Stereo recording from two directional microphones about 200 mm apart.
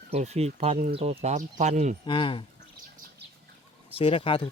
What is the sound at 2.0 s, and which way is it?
Speech, 25° left (ahead or behind).